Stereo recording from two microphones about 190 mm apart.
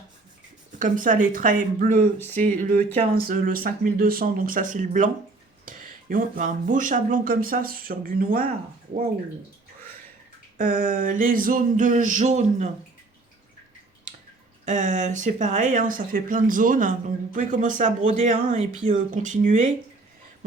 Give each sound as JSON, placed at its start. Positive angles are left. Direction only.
{"t": 0.8, "sound": "speech", "side_deg": -45}
{"t": 10.6, "sound": "speech", "side_deg": -45}
{"t": 14.6, "sound": "speech", "side_deg": -40}